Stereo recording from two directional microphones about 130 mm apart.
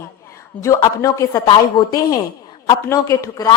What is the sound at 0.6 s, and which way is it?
A woman's voice, 25° left (ahead or behind).